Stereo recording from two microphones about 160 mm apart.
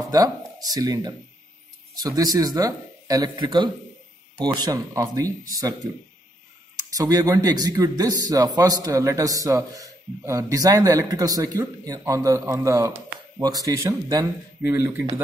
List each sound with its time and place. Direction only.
0.1 s speech: 25° right (ahead or behind)
7.0 s speech: 25° right (ahead or behind)